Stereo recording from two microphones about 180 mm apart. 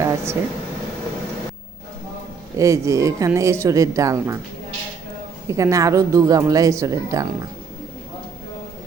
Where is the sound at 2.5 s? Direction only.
15° right (ahead or behind).